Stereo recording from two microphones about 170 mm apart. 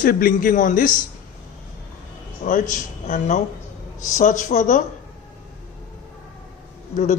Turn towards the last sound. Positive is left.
turn(degrees=50)  # may be behind; listen again after turning